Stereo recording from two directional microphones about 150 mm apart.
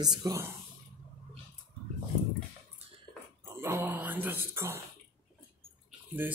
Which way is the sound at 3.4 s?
20° right (ahead or behind).